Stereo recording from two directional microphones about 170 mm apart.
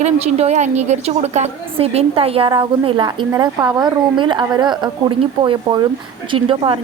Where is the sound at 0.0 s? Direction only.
40° right (ahead or behind).